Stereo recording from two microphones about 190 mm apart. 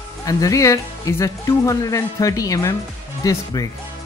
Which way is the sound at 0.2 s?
20° left (ahead or behind).